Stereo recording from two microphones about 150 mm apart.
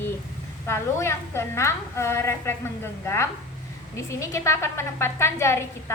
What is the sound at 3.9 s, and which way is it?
A woman's voice, 20° left (ahead or behind).